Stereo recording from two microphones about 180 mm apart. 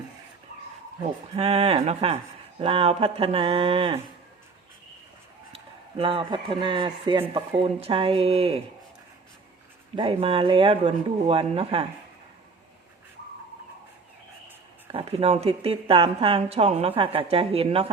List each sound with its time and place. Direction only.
1.4 s a woman's voice: 35° right (ahead or behind)
6.0 s a woman's voice: 30° right (ahead or behind)
9.9 s a woman's voice: 30° right (ahead or behind)
14.8 s a woman's voice: 35° right (ahead or behind)